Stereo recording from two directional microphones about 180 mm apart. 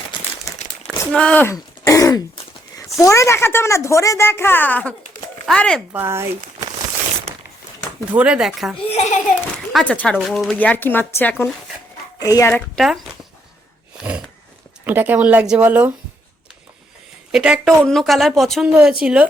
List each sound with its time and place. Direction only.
1.1 s speech: 5° left (ahead or behind)
1.5 s speech: 20° left (ahead or behind)
5.9 s speech: 15° right (ahead or behind)
8.1 s speech: 5° right (ahead or behind)
8.9 s a child's voice: 40° left (ahead or behind)
9.7 s speech: 5° left (ahead or behind)
14.0 s a sound: 5° right (ahead or behind)
14.8 s speech: 10° right (ahead or behind)
17.3 s speech: 5° right (ahead or behind)